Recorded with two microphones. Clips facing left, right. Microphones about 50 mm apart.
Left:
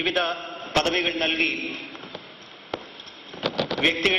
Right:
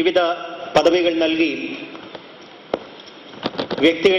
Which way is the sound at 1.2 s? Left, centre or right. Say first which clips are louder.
Right 7 dB; left.